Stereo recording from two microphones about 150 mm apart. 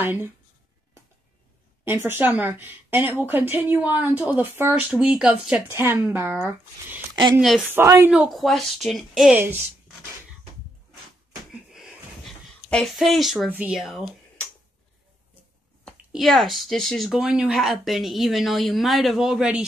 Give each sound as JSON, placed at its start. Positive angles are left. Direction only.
{"t": 0.0, "sound": "a woman's voice", "side_deg": -15}
{"t": 1.9, "sound": "a woman's voice", "side_deg": -15}
{"t": 5.7, "sound": "a woman's voice", "side_deg": -15}
{"t": 7.3, "sound": "speech", "side_deg": 0}
{"t": 7.6, "sound": "a woman's voice", "side_deg": -15}
{"t": 8.1, "sound": "speech", "side_deg": -5}
{"t": 11.5, "sound": "a sound", "side_deg": -5}
{"t": 12.6, "sound": "speech", "side_deg": 5}
{"t": 16.1, "sound": "speech", "side_deg": 0}